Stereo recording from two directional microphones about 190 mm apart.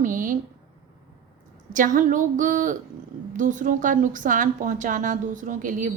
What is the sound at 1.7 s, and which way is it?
A woman's voice, 45° right (ahead or behind).